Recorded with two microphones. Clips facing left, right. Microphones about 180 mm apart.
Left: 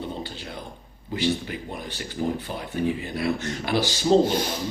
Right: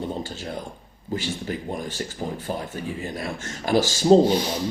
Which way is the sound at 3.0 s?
45° right (ahead or behind).